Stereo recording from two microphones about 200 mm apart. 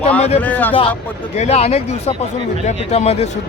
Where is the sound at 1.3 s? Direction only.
30° left (ahead or behind).